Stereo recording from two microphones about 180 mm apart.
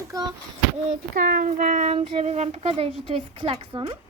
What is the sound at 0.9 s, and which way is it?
Child singing, 50° right (ahead or behind).